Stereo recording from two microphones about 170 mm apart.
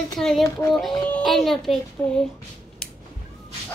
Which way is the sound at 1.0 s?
5° left (ahead or behind).